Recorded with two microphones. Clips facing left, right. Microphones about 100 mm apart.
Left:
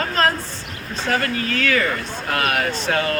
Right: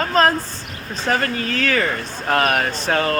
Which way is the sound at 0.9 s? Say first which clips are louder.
Right 1 dB; 35° right (ahead or behind).